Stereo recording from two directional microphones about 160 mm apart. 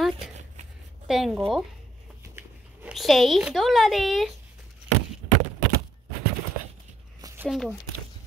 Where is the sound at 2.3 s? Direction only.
15° right (ahead or behind).